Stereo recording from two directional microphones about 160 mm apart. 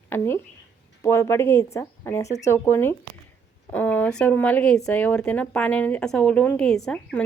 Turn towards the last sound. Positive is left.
turn(degrees=5)  # may be behind; listen again after turning